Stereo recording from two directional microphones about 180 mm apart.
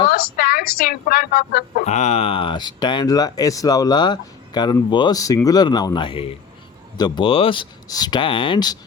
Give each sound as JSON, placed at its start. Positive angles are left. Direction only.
{"t": 0.1, "sound": "a woman's voice", "side_deg": 55}
{"t": 1.8, "sound": "speech", "side_deg": 40}